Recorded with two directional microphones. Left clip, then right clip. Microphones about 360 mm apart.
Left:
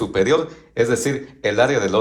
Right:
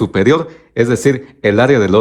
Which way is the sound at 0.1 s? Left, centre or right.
Right.